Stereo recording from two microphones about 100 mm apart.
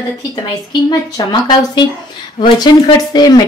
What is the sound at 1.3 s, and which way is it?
Speech, 50° left (ahead or behind).